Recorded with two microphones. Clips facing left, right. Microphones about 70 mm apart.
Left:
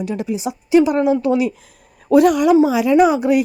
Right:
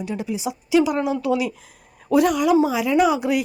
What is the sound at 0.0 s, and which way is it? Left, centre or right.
A woman's voice, left.